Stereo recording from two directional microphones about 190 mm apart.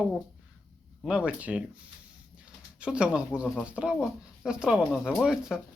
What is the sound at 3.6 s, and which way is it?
Speech, 5° right (ahead or behind).